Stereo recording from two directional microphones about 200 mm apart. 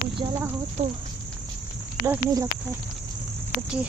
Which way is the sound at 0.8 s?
35° right (ahead or behind).